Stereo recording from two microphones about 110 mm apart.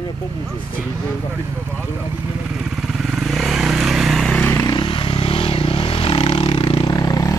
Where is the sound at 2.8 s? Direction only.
5° right (ahead or behind).